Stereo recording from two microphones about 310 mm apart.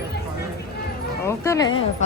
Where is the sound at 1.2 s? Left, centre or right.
Centre.